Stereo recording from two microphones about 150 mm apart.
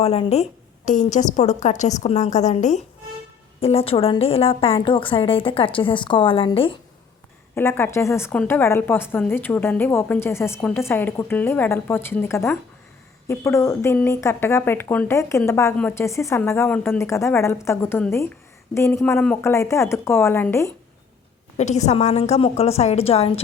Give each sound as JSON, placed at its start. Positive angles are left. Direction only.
{"t": 0.0, "sound": "a woman's voice", "side_deg": 40}
{"t": 0.9, "sound": "a woman's voice", "side_deg": 55}
{"t": 7.5, "sound": "a woman's voice", "side_deg": 15}
{"t": 21.6, "sound": "a woman's voice", "side_deg": 50}